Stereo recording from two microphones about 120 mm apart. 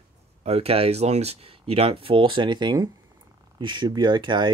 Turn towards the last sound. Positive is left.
turn(degrees=-40)  # may be behind; listen again after turning